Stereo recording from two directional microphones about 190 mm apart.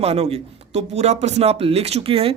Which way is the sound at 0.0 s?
35° right (ahead or behind).